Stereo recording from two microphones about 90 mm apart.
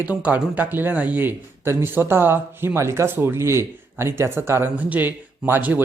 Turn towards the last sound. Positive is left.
turn(degrees=-20)  # may be behind; listen again after turning